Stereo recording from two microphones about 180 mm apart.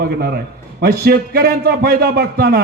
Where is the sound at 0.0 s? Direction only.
60° right (ahead or behind).